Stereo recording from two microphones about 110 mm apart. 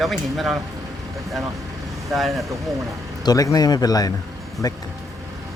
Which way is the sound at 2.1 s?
Centre (ahead or behind).